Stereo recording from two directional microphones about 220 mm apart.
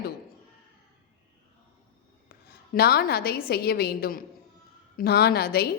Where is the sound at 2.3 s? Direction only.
45° left (ahead or behind).